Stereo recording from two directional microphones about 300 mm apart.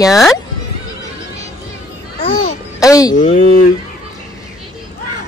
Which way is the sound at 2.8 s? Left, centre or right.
Centre.